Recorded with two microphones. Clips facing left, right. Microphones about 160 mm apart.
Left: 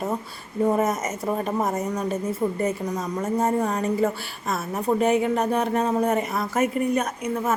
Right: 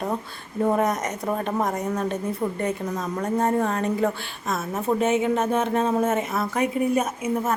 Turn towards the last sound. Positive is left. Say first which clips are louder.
# right 1 dB
turn(degrees=-5)  # may be behind; listen again after turning